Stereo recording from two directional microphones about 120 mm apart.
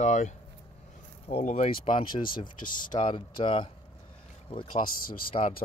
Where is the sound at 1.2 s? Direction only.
60° left (ahead or behind); by 2.0 s 80° left.